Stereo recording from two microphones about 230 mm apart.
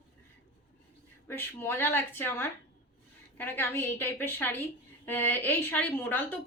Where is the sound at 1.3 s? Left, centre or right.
Centre.